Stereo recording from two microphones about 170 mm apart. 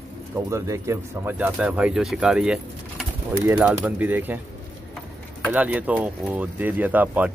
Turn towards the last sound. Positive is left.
turn(degrees=-10)  # may be behind; listen again after turning